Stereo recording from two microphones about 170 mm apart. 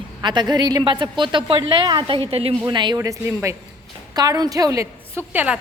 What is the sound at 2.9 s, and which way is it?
A woman's voice, 15° right (ahead or behind).